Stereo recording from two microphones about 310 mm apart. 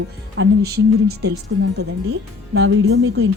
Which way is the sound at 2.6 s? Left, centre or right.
Right.